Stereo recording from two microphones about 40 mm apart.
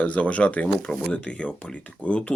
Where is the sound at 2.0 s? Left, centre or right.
Left.